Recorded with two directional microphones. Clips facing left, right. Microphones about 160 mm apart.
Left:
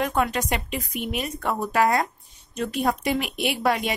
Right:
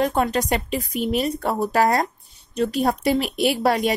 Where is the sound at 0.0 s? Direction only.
35° right (ahead or behind).